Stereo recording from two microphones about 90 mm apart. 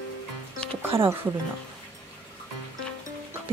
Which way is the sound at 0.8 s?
25° right (ahead or behind).